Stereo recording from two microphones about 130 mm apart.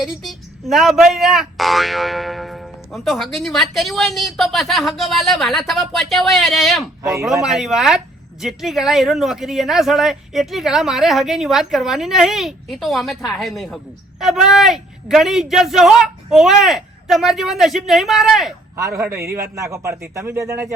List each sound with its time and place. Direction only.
0.0 s speech: centre (ahead or behind)
19.0 s a man's voice: 20° right (ahead or behind)